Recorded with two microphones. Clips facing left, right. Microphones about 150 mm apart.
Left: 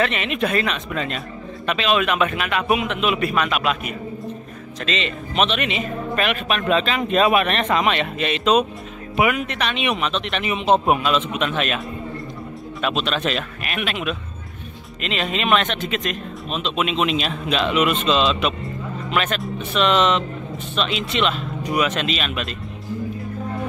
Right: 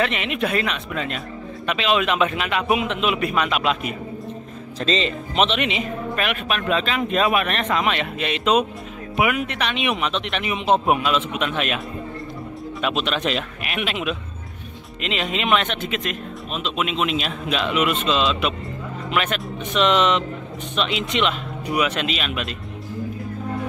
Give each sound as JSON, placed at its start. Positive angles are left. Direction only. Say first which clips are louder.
{"t": 0.0, "sound": "speech", "louder": "left 1 dB", "side_deg": -15}
{"t": 6.1, "sound": "speech", "louder": "left 3 dB", "side_deg": -5}
{"t": 12.8, "sound": "speech", "louder": "left 1 dB", "side_deg": -15}
{"t": 19.6, "sound": "speech", "louder": "even", "side_deg": -15}